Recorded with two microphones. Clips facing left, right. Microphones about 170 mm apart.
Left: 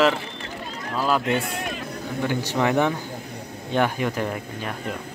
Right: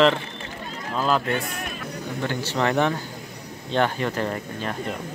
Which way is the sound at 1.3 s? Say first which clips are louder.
Left 2 dB; 25° left (ahead or behind).